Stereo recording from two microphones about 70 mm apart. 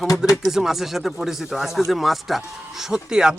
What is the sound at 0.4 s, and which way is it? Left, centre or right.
Speech, centre.